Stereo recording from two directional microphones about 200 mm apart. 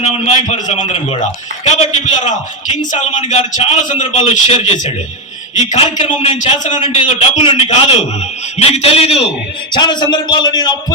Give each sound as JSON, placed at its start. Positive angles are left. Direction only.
{"t": 0.0, "sound": "a man's voice", "side_deg": 30}